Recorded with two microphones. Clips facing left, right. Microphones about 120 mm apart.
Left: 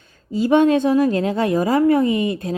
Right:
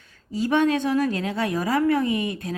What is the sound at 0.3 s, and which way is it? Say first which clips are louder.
A woman's voice: left 6 dB; 20° left (ahead or behind).